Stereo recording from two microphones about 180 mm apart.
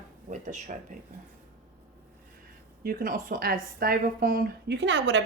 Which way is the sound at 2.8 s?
55° right (ahead or behind).